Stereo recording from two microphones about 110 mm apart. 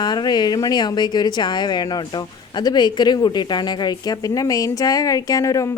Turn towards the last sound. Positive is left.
turn(degrees=30)  # may be behind; listen again after turning